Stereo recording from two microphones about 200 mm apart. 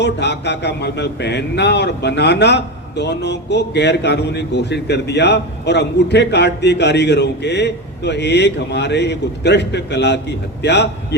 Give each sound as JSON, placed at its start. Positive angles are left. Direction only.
{"t": 0.0, "sound": "speech", "side_deg": 60}